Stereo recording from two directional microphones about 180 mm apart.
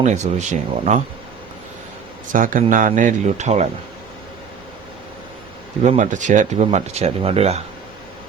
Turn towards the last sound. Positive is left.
turn(degrees=-35)  # may be behind; listen again after turning